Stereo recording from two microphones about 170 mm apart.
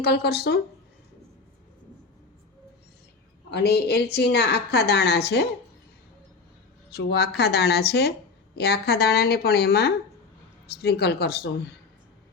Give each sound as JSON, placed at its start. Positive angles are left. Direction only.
{"t": 0.0, "sound": "a woman's voice", "side_deg": 70}
{"t": 3.5, "sound": "a woman's voice", "side_deg": 70}
{"t": 6.9, "sound": "a woman's voice", "side_deg": 75}